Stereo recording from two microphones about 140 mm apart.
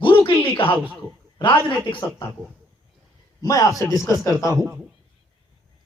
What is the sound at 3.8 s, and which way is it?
A man's voice, 30° right (ahead or behind).